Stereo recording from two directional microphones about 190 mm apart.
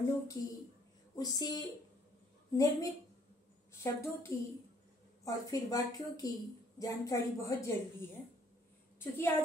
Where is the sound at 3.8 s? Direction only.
15° left (ahead or behind).